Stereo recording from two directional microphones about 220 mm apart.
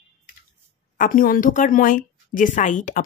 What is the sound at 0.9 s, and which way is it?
A woman's voice, 40° left (ahead or behind).